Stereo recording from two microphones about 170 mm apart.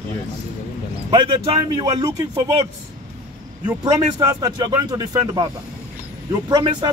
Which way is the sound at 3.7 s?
25° right (ahead or behind).